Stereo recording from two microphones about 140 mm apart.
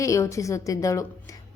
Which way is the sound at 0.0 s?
20° left (ahead or behind).